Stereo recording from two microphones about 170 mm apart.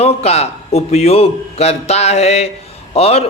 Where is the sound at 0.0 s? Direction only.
40° left (ahead or behind).